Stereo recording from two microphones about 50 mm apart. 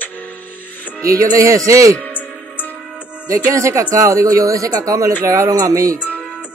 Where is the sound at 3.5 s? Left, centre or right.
Right.